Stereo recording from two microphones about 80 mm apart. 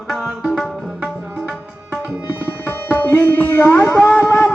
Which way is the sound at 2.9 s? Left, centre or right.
Left.